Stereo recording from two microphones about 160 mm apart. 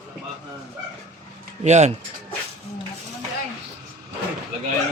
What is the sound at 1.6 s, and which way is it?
Speech, 45° right (ahead or behind).